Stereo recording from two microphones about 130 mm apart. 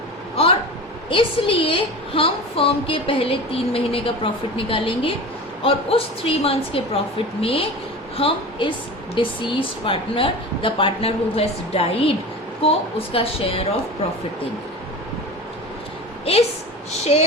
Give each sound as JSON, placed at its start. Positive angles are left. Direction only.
{"t": 1.1, "sound": "a woman's voice", "side_deg": 45}
{"t": 17.1, "sound": "a woman's voice", "side_deg": 55}